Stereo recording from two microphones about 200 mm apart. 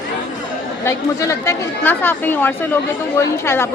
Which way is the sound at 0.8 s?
15° left (ahead or behind).